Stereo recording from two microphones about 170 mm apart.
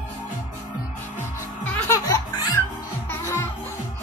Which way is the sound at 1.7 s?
20° left (ahead or behind).